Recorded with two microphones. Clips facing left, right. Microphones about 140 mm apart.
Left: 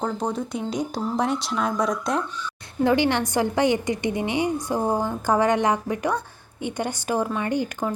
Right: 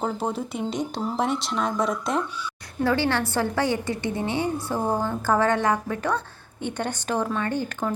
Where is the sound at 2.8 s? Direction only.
20° left (ahead or behind).